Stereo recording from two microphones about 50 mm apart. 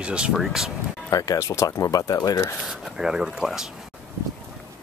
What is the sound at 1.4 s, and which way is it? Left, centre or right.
Speech, left.